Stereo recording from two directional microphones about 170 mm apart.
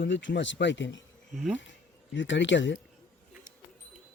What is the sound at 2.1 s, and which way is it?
Speech, 90° left.